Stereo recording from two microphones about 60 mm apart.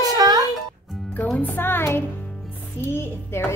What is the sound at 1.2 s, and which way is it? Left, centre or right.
A woman's voice, left.